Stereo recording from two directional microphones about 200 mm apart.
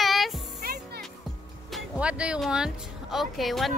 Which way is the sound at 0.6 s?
50° right (ahead or behind).